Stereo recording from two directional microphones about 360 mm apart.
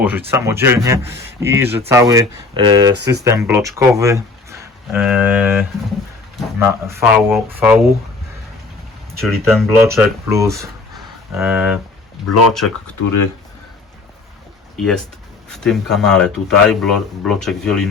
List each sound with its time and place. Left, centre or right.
0.0 s speech: centre
9.2 s speech: centre
13.0 s speech: left
14.8 s speech: centre